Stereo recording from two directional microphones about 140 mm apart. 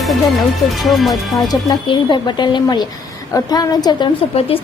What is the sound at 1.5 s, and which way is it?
A woman's voice, 30° left (ahead or behind).